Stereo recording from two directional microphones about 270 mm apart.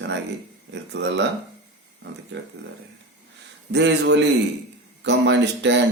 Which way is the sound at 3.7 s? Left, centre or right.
Right.